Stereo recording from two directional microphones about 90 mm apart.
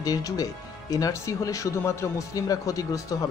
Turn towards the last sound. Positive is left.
turn(degrees=40)  # may be behind; listen again after turning